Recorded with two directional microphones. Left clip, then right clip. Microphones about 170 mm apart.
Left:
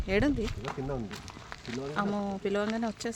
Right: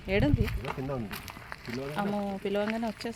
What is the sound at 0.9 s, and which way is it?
Speech, 35° right (ahead or behind).